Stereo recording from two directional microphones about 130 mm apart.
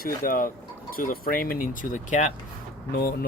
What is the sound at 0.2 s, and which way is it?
Speech, 90° left.